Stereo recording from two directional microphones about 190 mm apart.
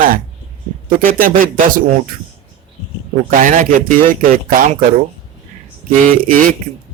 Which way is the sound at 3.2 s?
45° right (ahead or behind).